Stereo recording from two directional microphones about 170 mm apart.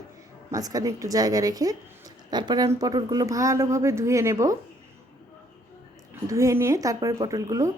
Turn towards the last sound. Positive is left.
turn(degrees=-20)  # may be behind; listen again after turning